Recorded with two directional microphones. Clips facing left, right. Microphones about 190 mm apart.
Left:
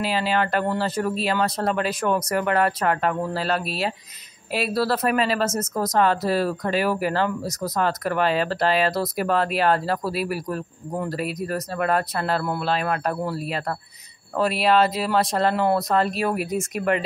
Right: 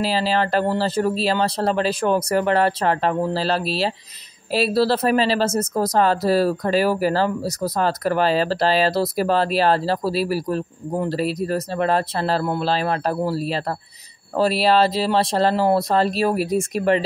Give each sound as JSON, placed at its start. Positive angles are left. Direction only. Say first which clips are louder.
{"t": 0.0, "sound": "speech", "louder": "right 2 dB", "side_deg": -30}